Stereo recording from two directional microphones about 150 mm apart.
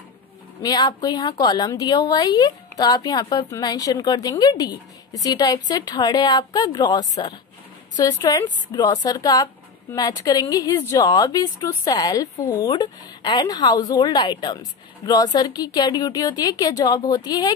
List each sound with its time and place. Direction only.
0.6 s speech: 30° left (ahead or behind)